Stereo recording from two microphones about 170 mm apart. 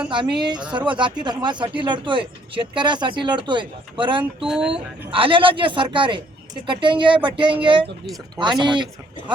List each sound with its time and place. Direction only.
0.3 s speech: 25° right (ahead or behind)
4.4 s speech: 5° right (ahead or behind)
4.7 s speech: 30° right (ahead or behind)